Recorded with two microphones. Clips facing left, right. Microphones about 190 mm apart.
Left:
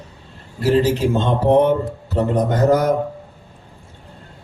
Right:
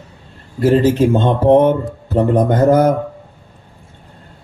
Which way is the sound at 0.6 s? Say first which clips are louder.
Right 4 dB; 55° right (ahead or behind).